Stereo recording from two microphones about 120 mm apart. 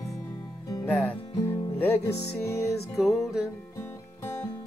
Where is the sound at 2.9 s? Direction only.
5° right (ahead or behind).